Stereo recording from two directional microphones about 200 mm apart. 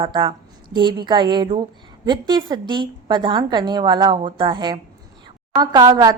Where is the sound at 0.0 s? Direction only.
25° right (ahead or behind).